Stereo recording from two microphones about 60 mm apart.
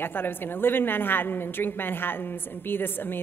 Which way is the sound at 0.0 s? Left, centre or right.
Left.